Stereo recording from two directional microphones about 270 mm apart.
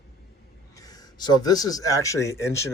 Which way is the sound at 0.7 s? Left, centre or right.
Centre.